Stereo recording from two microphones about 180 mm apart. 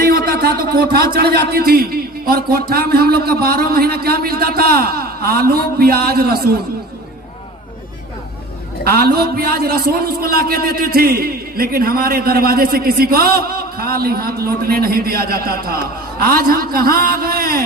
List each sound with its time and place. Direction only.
0.3 s a man's voice: 55° right (ahead or behind)
8.8 s a man's voice: 60° right (ahead or behind)